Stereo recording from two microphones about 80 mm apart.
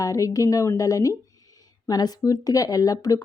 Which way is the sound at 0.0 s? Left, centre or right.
Left.